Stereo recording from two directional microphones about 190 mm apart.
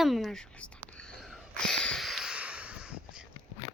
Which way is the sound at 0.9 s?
5° left (ahead or behind).